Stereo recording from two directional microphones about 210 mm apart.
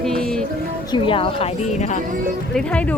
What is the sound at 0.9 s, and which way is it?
A woman's voice, 25° left (ahead or behind).